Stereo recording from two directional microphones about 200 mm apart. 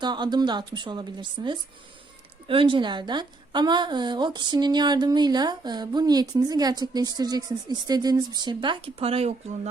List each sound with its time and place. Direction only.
0.0 s a woman's voice: 20° right (ahead or behind)